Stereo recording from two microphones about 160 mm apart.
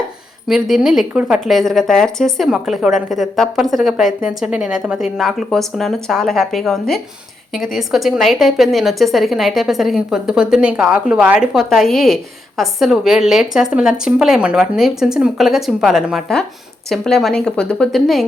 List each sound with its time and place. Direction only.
0.4 s a woman's voice: centre (ahead or behind)